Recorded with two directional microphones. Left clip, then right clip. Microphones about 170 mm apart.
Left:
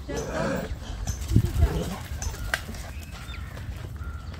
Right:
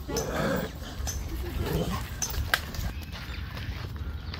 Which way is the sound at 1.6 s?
Centre (ahead or behind).